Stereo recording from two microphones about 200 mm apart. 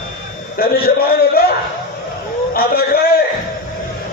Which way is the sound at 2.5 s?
50° left (ahead or behind).